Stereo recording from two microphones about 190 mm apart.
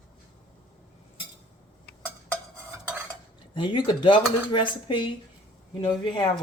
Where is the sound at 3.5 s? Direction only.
25° left (ahead or behind).